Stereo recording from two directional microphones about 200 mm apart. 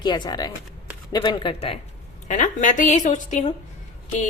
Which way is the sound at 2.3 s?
40° left (ahead or behind).